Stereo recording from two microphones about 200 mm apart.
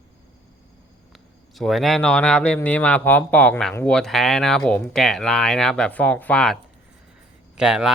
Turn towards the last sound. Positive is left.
turn(degrees=-5)  # may be behind; listen again after turning